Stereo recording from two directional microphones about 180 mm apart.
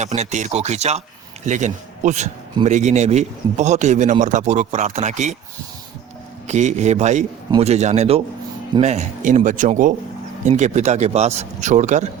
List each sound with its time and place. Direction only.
0.0 s a man's voice: 40° right (ahead or behind)
6.5 s a man's voice: 40° right (ahead or behind)